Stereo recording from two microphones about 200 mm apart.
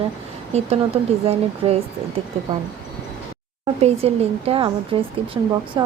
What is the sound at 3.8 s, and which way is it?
Speech, 30° right (ahead or behind).